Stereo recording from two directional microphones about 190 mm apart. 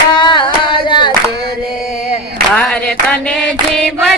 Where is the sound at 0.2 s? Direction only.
25° left (ahead or behind).